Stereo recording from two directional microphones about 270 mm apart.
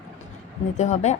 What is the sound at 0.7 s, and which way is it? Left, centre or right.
Speech, left.